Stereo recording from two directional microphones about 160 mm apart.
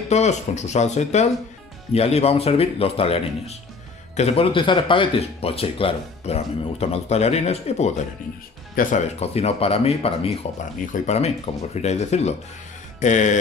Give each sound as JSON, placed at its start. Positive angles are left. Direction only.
{"t": 0.1, "sound": "speech", "side_deg": 45}
{"t": 8.8, "sound": "speech", "side_deg": 65}
{"t": 9.2, "sound": "speech", "side_deg": 40}